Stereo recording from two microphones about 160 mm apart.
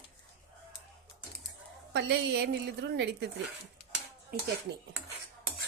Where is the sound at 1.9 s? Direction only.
90° right.